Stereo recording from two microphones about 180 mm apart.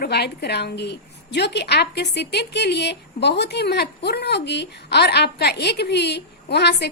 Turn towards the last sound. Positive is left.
turn(degrees=70)  # may be behind; listen again after turning